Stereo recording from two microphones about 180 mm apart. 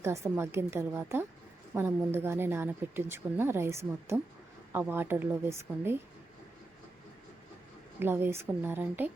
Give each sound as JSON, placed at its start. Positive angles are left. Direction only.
{"t": 0.0, "sound": "speech", "side_deg": -15}
{"t": 7.9, "sound": "speech", "side_deg": -10}